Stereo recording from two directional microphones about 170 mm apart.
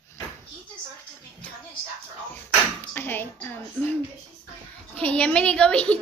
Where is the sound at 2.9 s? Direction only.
10° left (ahead or behind).